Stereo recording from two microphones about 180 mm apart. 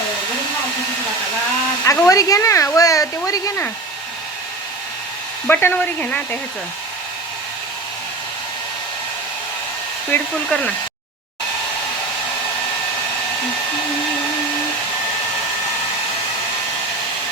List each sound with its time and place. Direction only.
1.8 s speech: 20° left (ahead or behind)
5.5 s speech: 10° left (ahead or behind)
10.1 s speech: 10° left (ahead or behind)